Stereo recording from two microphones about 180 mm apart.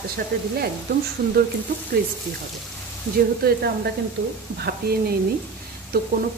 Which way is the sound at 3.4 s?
60° right (ahead or behind).